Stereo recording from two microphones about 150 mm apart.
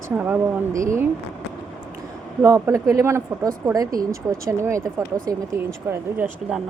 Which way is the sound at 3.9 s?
70° right (ahead or behind).